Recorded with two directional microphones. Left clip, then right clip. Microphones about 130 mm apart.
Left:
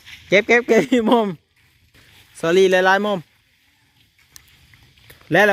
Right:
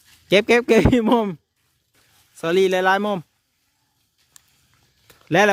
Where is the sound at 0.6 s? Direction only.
35° right (ahead or behind); by 1.4 s 20° right (ahead or behind).